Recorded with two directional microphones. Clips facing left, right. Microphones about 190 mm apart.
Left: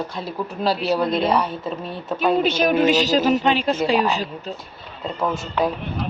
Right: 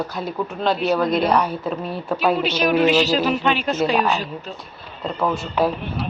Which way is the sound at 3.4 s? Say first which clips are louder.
Left 1 dB; 30° left (ahead or behind).